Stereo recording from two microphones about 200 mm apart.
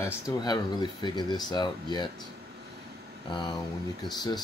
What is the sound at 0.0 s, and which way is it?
Speech, 20° left (ahead or behind).